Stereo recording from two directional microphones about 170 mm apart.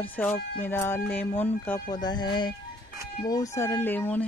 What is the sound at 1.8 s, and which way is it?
Speech, 25° left (ahead or behind).